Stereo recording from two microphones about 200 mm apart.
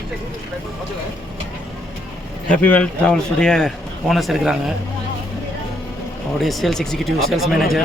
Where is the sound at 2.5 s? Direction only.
5° left (ahead or behind).